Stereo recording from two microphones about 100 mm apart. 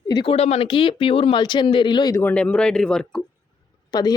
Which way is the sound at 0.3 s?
90° left.